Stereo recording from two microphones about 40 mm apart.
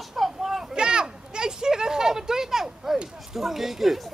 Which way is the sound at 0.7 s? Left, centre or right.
Right.